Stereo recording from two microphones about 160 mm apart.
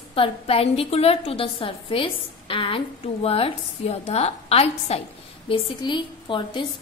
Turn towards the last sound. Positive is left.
turn(degrees=30)  # may be behind; listen again after turning